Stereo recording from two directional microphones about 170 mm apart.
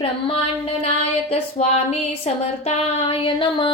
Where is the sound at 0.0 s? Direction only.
35° left (ahead or behind).